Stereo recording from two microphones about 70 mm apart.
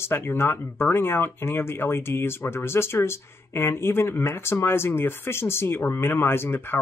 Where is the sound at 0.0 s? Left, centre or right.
Left.